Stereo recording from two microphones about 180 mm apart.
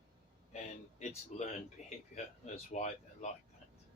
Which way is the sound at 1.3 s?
40° left (ahead or behind).